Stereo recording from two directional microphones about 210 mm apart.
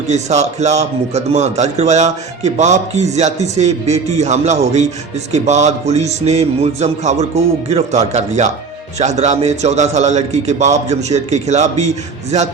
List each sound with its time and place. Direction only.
0.1 s a man's voice: 35° right (ahead or behind)